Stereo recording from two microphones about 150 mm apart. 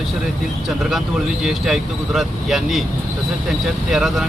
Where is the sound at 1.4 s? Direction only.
Centre (ahead or behind).